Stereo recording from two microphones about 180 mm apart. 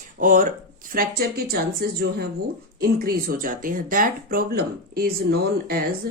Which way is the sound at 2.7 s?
55° right (ahead or behind).